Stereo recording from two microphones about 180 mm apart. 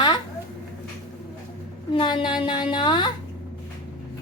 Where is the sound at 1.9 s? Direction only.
25° left (ahead or behind).